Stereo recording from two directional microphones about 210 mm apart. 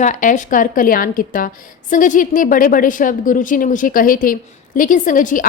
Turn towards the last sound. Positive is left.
turn(degrees=40)  # may be behind; listen again after turning